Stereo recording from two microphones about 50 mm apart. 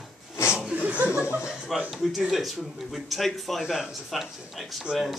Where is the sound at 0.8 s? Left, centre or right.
Right.